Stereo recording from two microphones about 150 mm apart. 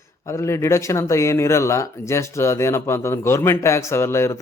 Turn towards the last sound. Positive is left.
turn(degrees=15)  # may be behind; listen again after turning